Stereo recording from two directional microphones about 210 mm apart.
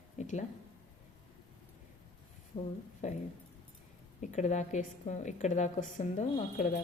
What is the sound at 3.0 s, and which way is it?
A woman's voice, 35° left (ahead or behind).